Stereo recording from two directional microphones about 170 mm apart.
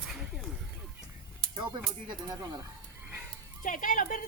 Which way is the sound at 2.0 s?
20° right (ahead or behind).